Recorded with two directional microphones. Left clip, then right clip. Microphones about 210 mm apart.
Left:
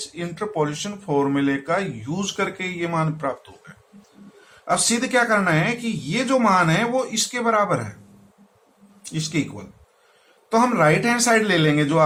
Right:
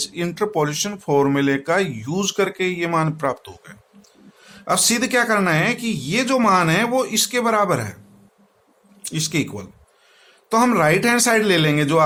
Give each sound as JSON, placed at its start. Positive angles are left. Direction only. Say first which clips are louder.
{"t": 0.0, "sound": "speech", "louder": "right 6 dB", "side_deg": -50}
{"t": 9.0, "sound": "speech", "louder": "right 3 dB", "side_deg": -45}